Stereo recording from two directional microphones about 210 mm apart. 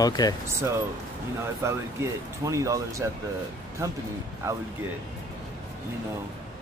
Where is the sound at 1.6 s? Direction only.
15° right (ahead or behind).